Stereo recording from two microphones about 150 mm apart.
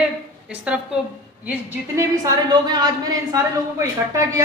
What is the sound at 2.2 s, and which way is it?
Speech, 25° right (ahead or behind).